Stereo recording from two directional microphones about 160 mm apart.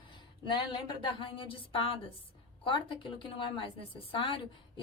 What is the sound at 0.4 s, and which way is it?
A woman's voice, 30° left (ahead or behind).